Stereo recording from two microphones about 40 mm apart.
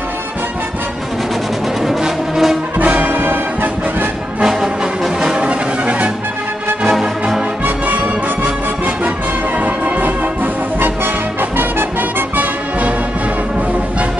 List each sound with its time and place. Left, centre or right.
1.9 s music: centre
2.8 s brass instrument: right
4.5 s music: centre
5.2 s music: right
6.9 s music: centre
7.6 s music: right
9.8 s music: right